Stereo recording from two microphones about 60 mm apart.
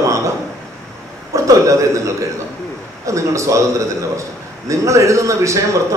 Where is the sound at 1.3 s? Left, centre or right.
Right.